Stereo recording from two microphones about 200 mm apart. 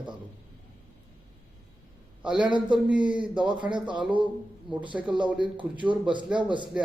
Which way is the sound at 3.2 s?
25° right (ahead or behind).